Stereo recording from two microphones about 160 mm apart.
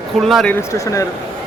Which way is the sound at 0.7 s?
20° left (ahead or behind).